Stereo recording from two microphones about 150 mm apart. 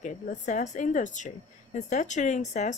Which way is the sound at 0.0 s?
55° left (ahead or behind).